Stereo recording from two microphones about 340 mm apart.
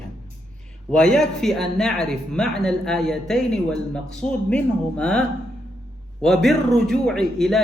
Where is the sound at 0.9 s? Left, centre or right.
Centre.